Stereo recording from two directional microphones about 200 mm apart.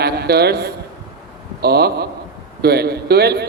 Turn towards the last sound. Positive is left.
turn(degrees=-55)  # may be behind; listen again after turning